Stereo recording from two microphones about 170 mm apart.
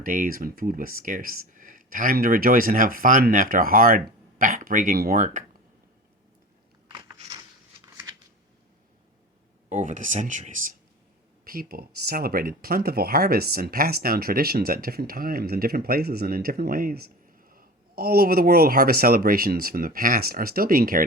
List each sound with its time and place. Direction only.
0.0 s speech: 55° right (ahead or behind)
5.1 s speech: 50° right (ahead or behind)
6.9 s a sound: 20° right (ahead or behind)
9.6 s speech: 45° right (ahead or behind)
11.4 s speech: 60° right (ahead or behind)